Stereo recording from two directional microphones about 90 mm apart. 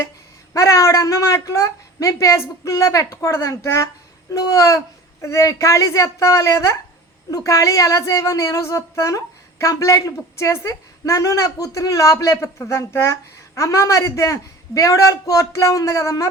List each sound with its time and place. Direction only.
0.5 s a woman's voice: 35° left (ahead or behind)